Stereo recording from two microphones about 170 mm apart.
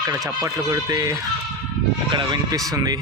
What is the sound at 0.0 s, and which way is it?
Speech, 20° right (ahead or behind).